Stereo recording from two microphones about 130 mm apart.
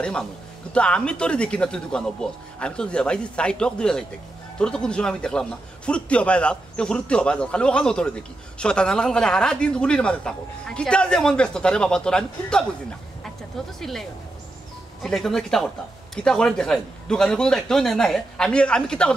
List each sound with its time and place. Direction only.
0.0 s speech: 5° left (ahead or behind)
13.7 s a man's voice: centre (ahead or behind)